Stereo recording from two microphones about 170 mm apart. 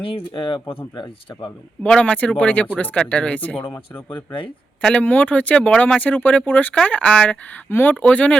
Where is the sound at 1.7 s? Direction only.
5° left (ahead or behind).